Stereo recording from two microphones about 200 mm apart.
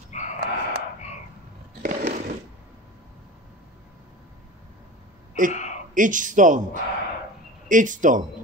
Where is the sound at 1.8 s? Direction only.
45° right (ahead or behind).